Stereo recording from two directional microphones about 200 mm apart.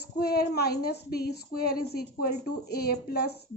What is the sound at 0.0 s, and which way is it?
A woman's voice, 50° left (ahead or behind).